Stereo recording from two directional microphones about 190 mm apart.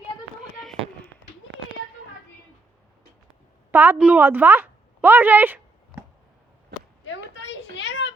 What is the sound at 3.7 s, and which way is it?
A woman's voice, 10° right (ahead or behind).